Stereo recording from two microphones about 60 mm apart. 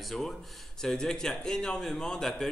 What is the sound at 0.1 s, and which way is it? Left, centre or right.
A man's voice, centre.